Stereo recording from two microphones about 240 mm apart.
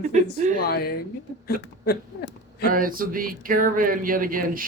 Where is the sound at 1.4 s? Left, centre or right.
Left.